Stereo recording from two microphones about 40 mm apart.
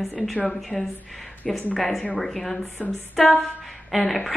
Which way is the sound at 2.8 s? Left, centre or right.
Left.